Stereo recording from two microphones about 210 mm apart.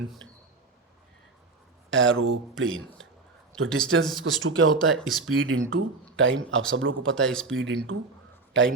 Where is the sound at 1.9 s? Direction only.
65° right (ahead or behind).